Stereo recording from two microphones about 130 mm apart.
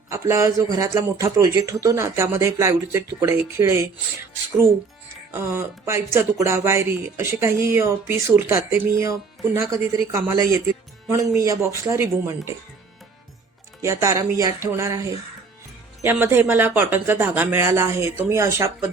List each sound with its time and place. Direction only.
0.1 s speech: 20° right (ahead or behind)
5.3 s speech: 20° right (ahead or behind)
13.8 s speech: 25° right (ahead or behind)
16.2 s speech: 20° right (ahead or behind)